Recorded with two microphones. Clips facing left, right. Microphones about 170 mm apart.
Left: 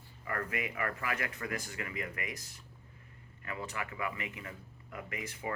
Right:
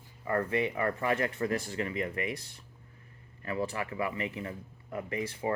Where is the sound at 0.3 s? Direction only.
30° right (ahead or behind).